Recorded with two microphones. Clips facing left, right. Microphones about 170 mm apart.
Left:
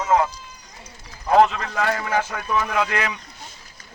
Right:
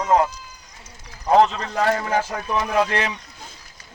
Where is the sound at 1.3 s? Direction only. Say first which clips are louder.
Even; 30° right (ahead or behind).